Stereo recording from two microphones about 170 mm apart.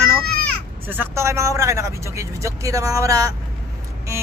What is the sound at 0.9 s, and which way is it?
Speech, 15° right (ahead or behind).